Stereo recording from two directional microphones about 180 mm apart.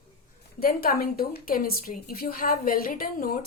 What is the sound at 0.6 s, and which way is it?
A woman's voice, 55° left (ahead or behind).